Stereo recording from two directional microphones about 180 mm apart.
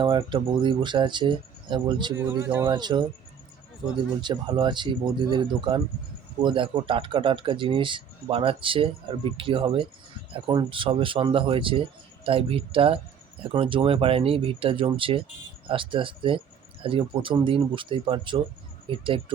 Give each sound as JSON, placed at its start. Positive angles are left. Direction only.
{"t": 0.0, "sound": "speech", "side_deg": -25}
{"t": 2.4, "sound": "speech", "side_deg": -15}
{"t": 2.6, "sound": "speech", "side_deg": -25}
{"t": 4.2, "sound": "speech", "side_deg": -25}